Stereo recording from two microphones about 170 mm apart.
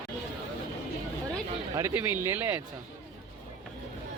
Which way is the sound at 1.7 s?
15° right (ahead or behind).